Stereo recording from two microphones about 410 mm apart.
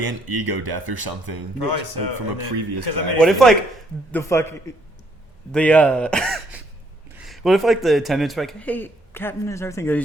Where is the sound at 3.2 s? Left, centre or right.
Centre.